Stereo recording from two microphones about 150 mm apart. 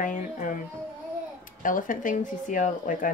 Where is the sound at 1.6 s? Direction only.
65° left (ahead or behind).